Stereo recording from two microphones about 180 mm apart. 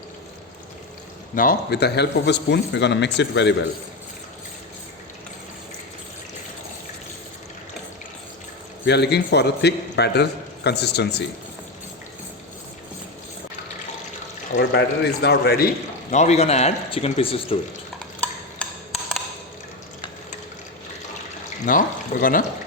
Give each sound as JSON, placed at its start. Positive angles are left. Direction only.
{"t": 1.4, "sound": "a man's voice", "side_deg": 60}
{"t": 8.8, "sound": "a man's voice", "side_deg": 70}
{"t": 14.6, "sound": "a man's voice", "side_deg": 70}
{"t": 16.1, "sound": "speech", "side_deg": 40}
{"t": 18.6, "sound": "a sound", "side_deg": 5}
{"t": 21.7, "sound": "speech", "side_deg": 50}